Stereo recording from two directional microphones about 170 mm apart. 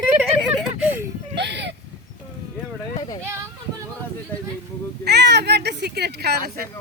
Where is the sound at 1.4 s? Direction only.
90° right.